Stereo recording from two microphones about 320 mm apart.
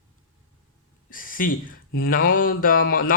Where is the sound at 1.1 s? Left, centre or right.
Left.